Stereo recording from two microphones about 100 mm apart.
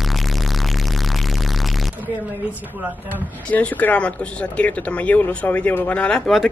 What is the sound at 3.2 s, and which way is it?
Speech, 15° left (ahead or behind).